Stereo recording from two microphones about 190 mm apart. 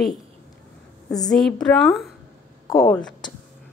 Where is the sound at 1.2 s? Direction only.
Centre (ahead or behind).